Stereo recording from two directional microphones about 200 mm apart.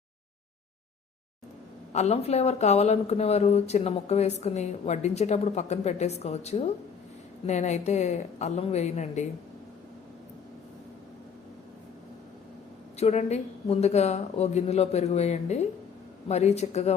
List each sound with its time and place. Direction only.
1.9 s speech: 35° left (ahead or behind)
13.0 s speech: 35° left (ahead or behind)